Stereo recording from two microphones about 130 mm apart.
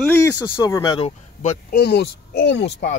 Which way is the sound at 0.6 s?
30° left (ahead or behind).